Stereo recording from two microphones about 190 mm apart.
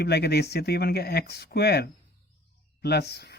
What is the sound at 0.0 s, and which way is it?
Speech, 60° left (ahead or behind).